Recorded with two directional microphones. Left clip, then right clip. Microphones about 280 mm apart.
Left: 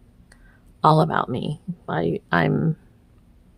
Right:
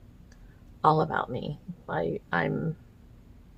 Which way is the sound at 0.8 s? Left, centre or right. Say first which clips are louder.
Left 6 dB; left.